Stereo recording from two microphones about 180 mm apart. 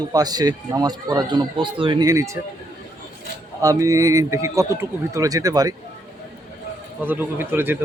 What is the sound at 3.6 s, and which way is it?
A man's voice, 20° right (ahead or behind).